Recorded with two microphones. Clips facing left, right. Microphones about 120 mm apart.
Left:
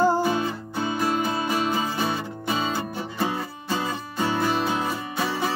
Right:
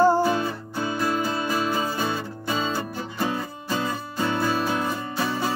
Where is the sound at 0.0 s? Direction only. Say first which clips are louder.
Right 2 dB; 20° left (ahead or behind).